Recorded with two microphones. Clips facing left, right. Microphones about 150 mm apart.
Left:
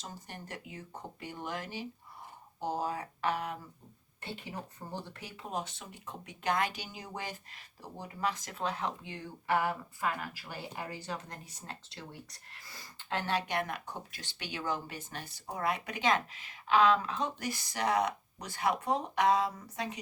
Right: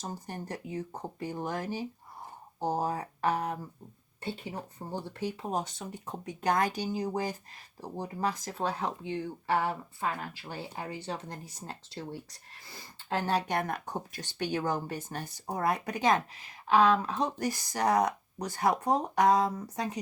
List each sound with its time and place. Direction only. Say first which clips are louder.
0.0 s speech: right 7 dB; 40° right (ahead or behind)